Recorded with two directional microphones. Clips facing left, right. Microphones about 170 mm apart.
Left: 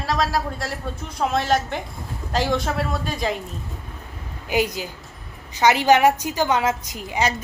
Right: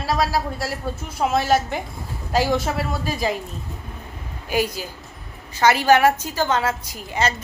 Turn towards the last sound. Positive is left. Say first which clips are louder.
# even
turn(degrees=15)  # may be behind; listen again after turning